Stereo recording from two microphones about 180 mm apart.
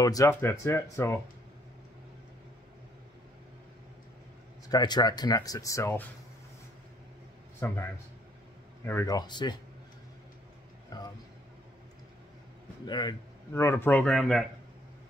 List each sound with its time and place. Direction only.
0.0 s speech: 20° left (ahead or behind)
4.6 s speech: 25° left (ahead or behind)
7.6 s speech: 15° left (ahead or behind)
8.8 s speech: 20° left (ahead or behind)
10.9 s speech: 20° left (ahead or behind)
12.8 s speech: 25° left (ahead or behind)
13.5 s speech: 15° left (ahead or behind)